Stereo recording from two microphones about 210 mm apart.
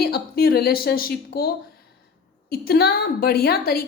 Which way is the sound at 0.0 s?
45° left (ahead or behind).